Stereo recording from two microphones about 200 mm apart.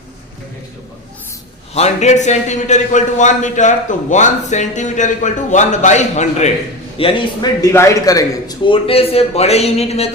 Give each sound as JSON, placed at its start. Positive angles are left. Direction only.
{"t": 1.7, "sound": "a man's voice", "side_deg": 35}
{"t": 7.7, "sound": "a man's voice", "side_deg": 15}